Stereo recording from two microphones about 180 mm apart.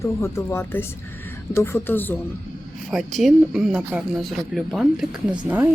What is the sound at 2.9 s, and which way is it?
Speech, centre (ahead or behind).